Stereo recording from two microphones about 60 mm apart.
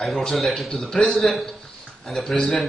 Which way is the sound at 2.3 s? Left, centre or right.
Centre.